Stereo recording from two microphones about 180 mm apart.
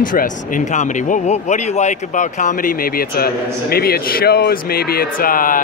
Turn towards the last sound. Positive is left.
turn(degrees=50)  # may be behind; listen again after turning